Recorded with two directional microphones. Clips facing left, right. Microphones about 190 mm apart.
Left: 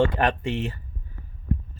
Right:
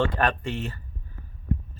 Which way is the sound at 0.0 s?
15° left (ahead or behind).